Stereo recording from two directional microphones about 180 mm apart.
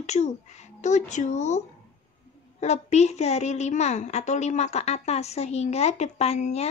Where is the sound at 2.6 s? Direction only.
40° left (ahead or behind).